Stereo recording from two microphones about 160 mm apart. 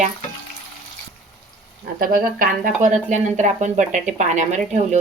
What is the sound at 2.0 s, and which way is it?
Speech, 60° right (ahead or behind).